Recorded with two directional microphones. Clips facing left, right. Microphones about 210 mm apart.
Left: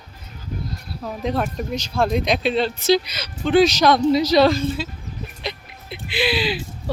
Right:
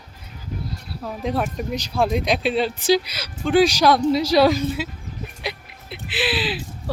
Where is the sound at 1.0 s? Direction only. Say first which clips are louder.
Left 1 dB; 5° right (ahead or behind).